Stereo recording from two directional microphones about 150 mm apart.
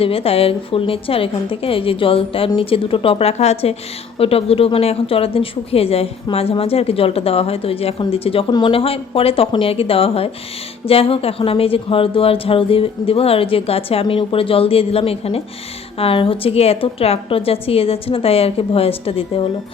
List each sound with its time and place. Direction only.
0.0 s a woman's voice: 40° left (ahead or behind)